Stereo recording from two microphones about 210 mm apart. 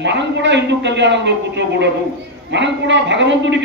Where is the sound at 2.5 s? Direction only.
60° right (ahead or behind).